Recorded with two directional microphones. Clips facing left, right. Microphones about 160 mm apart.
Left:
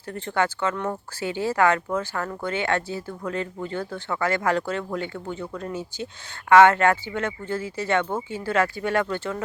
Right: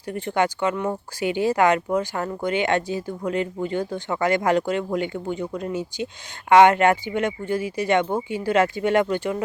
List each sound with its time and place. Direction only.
0.1 s speech: 15° right (ahead or behind)